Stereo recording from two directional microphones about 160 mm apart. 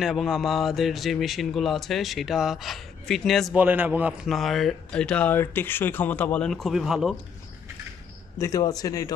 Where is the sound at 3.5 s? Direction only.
10° right (ahead or behind).